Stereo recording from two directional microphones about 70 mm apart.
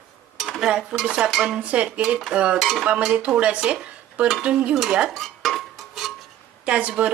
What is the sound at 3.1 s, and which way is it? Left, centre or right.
Dishes, centre.